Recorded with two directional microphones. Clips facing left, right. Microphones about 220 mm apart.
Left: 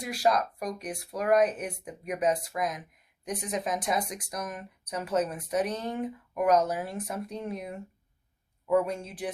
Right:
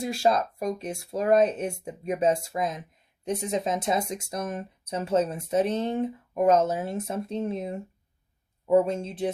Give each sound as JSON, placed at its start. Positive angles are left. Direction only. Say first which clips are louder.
{"t": 0.0, "sound": "speech", "louder": "right 3 dB", "side_deg": -25}